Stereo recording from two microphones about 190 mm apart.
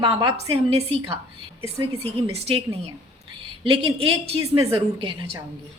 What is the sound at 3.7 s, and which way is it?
Speech, 30° right (ahead or behind).